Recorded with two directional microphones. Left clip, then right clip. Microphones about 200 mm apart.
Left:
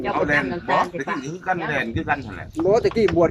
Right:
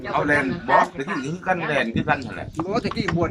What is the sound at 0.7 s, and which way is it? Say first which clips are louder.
Speech: right 3 dB; centre (ahead or behind).